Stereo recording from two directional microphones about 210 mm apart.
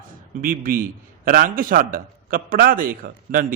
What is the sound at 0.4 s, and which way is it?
A man's voice, 40° right (ahead or behind).